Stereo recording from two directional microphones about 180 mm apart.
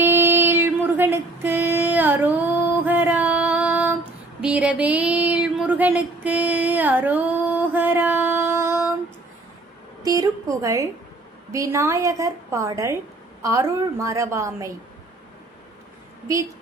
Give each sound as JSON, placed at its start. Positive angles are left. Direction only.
{"t": 0.0, "sound": "female singing", "side_deg": -15}
{"t": 4.4, "sound": "a sound", "side_deg": -5}
{"t": 10.0, "sound": "a woman's voice", "side_deg": -20}